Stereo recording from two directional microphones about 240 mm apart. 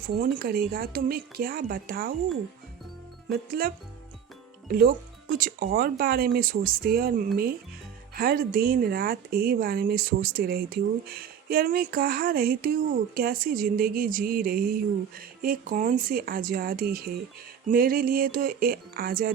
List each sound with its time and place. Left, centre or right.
0.2 s speech: right
3.3 s speech: right
4.7 s speech: right